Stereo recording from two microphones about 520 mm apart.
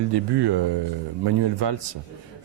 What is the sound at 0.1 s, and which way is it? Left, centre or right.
Speech, right.